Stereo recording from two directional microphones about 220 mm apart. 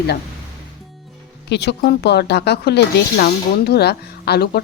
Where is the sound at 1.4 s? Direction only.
50° left (ahead or behind).